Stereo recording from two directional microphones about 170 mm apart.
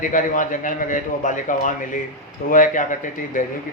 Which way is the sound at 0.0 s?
50° left (ahead or behind).